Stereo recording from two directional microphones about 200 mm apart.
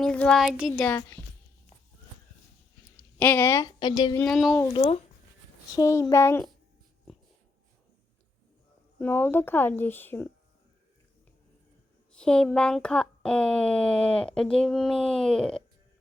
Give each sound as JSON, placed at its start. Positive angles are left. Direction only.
{"t": 0.0, "sound": "speech", "side_deg": 5}
{"t": 3.2, "sound": "speech", "side_deg": 10}
{"t": 4.2, "sound": "speech", "side_deg": 0}
{"t": 4.5, "sound": "speech", "side_deg": 15}
{"t": 5.7, "sound": "speech", "side_deg": 15}
{"t": 9.0, "sound": "speech", "side_deg": 10}
{"t": 12.1, "sound": "speech", "side_deg": 5}